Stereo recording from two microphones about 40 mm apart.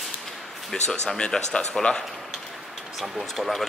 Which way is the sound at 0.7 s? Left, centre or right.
Centre.